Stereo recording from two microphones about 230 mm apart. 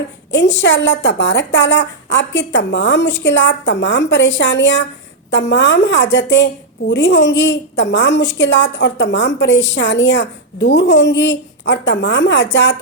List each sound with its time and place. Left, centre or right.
0.3 s a woman's voice: left